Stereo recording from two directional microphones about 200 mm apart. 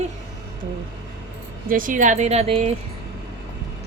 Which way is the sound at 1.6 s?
45° right (ahead or behind).